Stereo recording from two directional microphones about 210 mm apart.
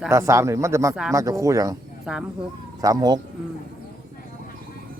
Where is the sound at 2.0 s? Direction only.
5° right (ahead or behind).